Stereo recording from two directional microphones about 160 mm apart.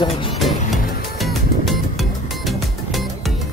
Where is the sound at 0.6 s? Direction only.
60° left (ahead or behind).